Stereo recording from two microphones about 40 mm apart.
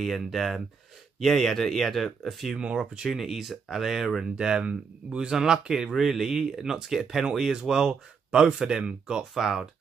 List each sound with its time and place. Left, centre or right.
0.0 s speech: centre
1.2 s speech: centre
4.2 s speech: centre
7.7 s speech: centre
9.3 s speech: centre